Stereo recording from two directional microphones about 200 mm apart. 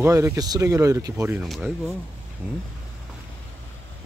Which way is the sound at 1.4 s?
Centre (ahead or behind).